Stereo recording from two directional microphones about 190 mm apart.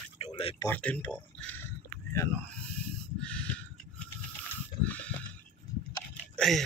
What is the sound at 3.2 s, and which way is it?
Crow, 5° left (ahead or behind).